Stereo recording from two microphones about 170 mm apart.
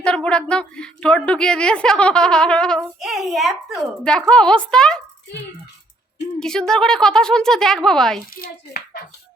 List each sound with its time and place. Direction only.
0.0 s a woman's voice: 5° left (ahead or behind)
6.4 s a woman's voice: 5° left (ahead or behind)
8.4 s a child's voice: 65° left (ahead or behind)